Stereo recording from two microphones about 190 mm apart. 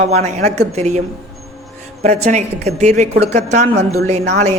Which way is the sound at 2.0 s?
35° right (ahead or behind).